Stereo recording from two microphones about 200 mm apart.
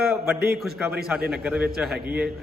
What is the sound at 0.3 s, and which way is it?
Speech, 50° right (ahead or behind).